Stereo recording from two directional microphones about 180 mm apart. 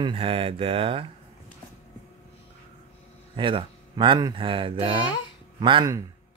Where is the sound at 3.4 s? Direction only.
30° right (ahead or behind).